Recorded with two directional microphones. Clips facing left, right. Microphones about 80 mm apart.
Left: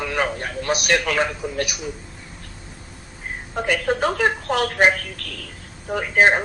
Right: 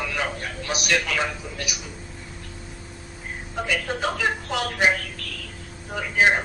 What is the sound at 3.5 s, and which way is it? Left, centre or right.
A man's voice, left.